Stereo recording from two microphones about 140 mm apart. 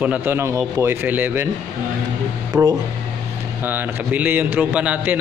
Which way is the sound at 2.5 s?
10° right (ahead or behind).